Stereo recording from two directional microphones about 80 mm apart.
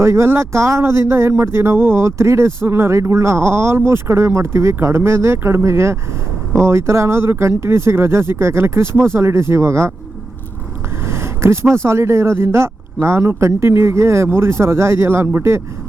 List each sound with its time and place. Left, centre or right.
0.0 s speech: right
11.0 s a sound: right
11.7 s speech: right